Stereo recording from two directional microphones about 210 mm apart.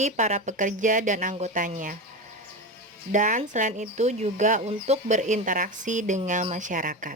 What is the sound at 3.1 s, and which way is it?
Speech, 35° right (ahead or behind).